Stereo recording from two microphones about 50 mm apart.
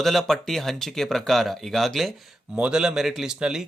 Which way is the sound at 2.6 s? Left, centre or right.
Centre.